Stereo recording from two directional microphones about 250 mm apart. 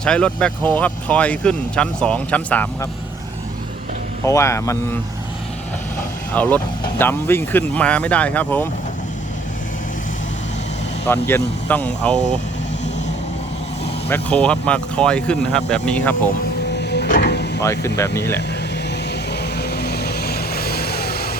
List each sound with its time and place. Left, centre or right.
0.0 s speech: centre
4.2 s speech: centre
6.3 s speech: centre
11.0 s speech: centre
14.1 s speech: centre
16.9 s music: left
17.6 s speech: centre
19.4 s vehicle: left